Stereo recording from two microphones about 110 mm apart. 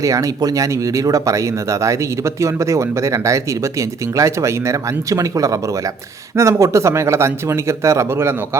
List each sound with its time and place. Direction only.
0.0 s speech: 30° right (ahead or behind)